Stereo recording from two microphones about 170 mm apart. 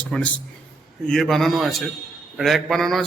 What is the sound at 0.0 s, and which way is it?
A man's voice, 5° left (ahead or behind).